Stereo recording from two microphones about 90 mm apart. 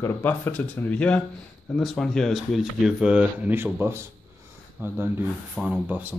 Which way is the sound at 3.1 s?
15° right (ahead or behind).